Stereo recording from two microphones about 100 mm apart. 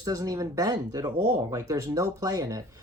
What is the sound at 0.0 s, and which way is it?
Speech, 35° right (ahead or behind).